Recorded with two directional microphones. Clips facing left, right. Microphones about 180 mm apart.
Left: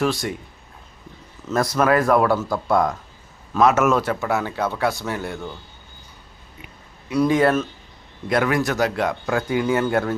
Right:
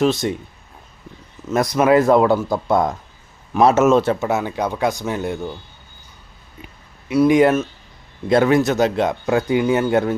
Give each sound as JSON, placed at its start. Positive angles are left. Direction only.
{"t": 0.0, "sound": "a man's voice", "side_deg": -20}
{"t": 1.5, "sound": "a man's voice", "side_deg": -20}
{"t": 7.1, "sound": "speech", "side_deg": -10}
{"t": 8.3, "sound": "a man's voice", "side_deg": -25}